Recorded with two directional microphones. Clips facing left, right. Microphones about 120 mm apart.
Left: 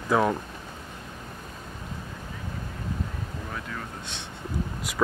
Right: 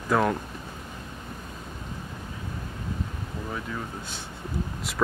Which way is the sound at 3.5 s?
10° right (ahead or behind).